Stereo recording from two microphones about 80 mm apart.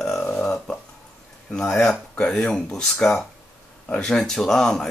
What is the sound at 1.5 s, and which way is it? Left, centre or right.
Speech, centre.